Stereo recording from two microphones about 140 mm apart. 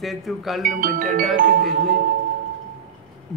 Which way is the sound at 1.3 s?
80° right.